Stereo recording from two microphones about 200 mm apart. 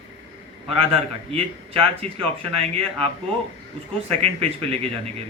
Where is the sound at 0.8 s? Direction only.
30° right (ahead or behind).